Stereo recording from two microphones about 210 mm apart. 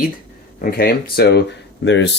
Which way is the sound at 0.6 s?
45° left (ahead or behind).